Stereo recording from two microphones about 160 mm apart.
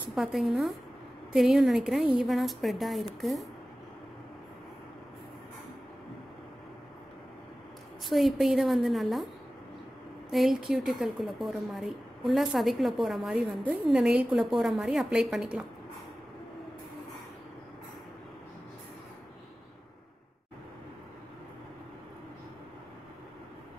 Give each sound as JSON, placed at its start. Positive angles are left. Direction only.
{"t": 0.1, "sound": "a woman's voice", "side_deg": 0}
{"t": 8.1, "sound": "a woman's voice", "side_deg": 0}
{"t": 10.3, "sound": "a woman's voice", "side_deg": 0}